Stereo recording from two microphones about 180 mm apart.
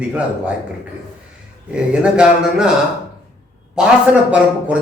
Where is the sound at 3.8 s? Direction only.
5° right (ahead or behind).